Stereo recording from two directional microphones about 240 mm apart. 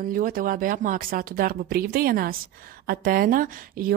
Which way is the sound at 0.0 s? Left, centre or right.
Right.